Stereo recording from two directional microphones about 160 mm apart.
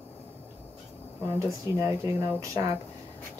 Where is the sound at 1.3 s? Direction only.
15° right (ahead or behind).